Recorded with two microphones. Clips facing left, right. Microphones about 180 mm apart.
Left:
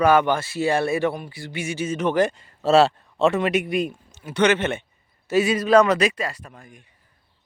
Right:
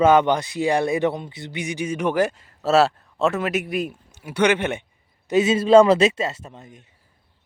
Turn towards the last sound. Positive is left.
turn(degrees=-25)  # may be behind; listen again after turning